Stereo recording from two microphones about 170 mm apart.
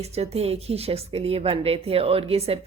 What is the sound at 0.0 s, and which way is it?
Speech, 40° right (ahead or behind).